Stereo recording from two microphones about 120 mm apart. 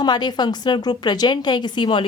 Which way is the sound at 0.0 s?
35° left (ahead or behind).